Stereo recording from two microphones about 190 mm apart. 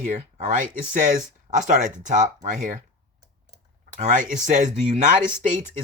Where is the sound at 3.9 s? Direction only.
45° right (ahead or behind).